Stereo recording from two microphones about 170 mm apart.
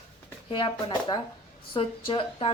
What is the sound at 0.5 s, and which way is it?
A woman's voice, 30° left (ahead or behind).